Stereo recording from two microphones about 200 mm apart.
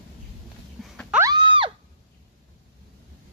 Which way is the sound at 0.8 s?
Centre (ahead or behind).